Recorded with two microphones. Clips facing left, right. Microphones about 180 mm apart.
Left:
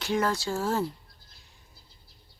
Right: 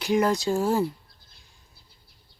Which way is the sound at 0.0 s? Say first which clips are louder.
Right 5 dB; 15° right (ahead or behind).